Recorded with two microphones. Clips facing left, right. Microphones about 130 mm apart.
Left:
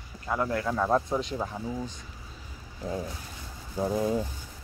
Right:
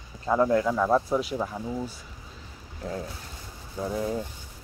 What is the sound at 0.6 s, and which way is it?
Speech, centre (ahead or behind).